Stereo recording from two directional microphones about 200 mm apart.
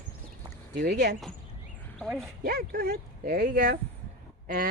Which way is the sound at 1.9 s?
Centre (ahead or behind).